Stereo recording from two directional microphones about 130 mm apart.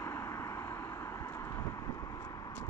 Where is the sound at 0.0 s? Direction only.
20° left (ahead or behind).